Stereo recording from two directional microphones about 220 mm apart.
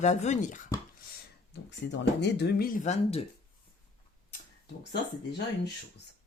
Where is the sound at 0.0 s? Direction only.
30° left (ahead or behind).